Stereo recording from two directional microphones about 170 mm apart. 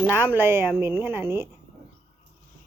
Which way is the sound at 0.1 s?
10° right (ahead or behind).